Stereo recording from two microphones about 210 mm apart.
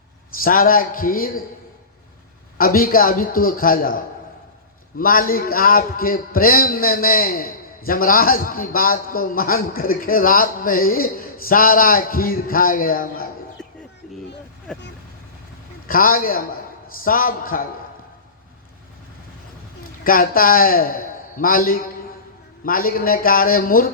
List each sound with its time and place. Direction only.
0.4 s a man's voice: 40° left (ahead or behind)
2.6 s a man's voice: 45° left (ahead or behind)
14.7 s speech: 5° left (ahead or behind)
15.9 s a man's voice: 40° left (ahead or behind)
19.8 s a man's voice: 40° left (ahead or behind)